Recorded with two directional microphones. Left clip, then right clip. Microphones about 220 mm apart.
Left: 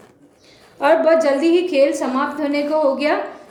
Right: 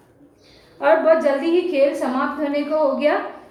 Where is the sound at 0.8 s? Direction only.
45° left (ahead or behind).